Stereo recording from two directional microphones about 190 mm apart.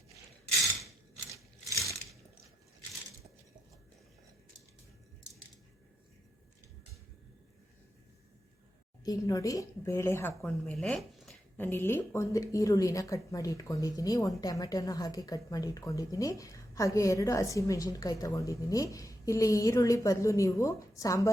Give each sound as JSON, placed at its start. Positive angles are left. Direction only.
{"t": 9.0, "sound": "a woman's voice", "side_deg": 20}